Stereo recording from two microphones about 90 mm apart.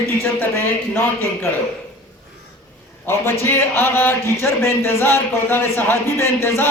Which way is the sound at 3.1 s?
30° left (ahead or behind).